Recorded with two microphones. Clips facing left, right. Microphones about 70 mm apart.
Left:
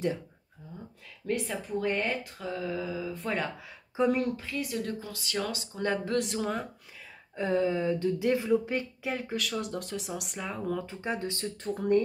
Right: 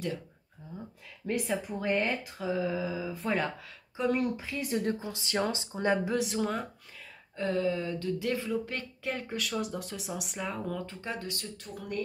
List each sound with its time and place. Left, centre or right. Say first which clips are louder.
0.6 s speech: right 2 dB; centre
4.0 s speech: left 4 dB; left
4.6 s speech: right 3 dB; right
6.1 s speech: even; centre
7.3 s speech: left 2 dB; centre
9.0 s speech: left 2 dB; centre; by 12.0 s left